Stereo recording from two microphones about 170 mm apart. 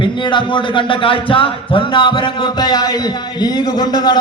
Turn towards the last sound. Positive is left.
turn(degrees=25)  # may be behind; listen again after turning